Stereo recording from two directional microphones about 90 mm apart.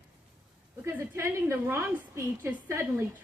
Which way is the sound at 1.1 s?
30° right (ahead or behind).